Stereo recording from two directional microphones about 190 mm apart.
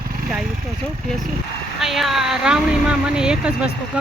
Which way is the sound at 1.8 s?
Centre (ahead or behind).